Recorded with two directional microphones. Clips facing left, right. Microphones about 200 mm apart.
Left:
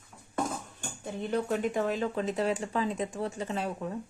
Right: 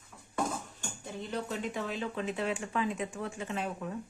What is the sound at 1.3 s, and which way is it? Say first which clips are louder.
Speech: left 7 dB; 50° left (ahead or behind).